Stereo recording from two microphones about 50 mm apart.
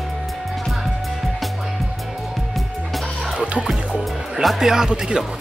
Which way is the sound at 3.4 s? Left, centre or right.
Right.